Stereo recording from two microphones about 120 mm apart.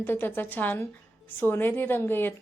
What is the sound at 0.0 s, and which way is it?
A woman's voice, 15° left (ahead or behind).